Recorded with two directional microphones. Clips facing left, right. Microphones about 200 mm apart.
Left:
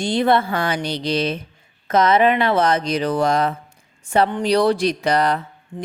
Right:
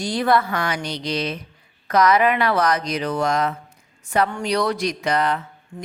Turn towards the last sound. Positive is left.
turn(degrees=20)  # may be behind; listen again after turning